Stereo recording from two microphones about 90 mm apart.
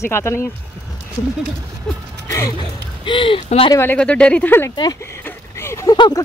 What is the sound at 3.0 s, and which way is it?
Speech, 65° left (ahead or behind).